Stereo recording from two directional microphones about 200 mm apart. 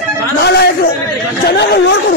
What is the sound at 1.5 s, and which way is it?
Speech, 55° left (ahead or behind).